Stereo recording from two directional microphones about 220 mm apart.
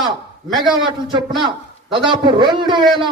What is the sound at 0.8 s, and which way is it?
A man's voice, 20° right (ahead or behind).